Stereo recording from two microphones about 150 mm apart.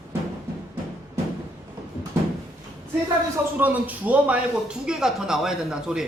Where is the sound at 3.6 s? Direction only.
10° right (ahead or behind).